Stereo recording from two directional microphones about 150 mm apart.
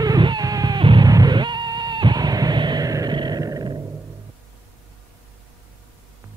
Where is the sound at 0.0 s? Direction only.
25° right (ahead or behind).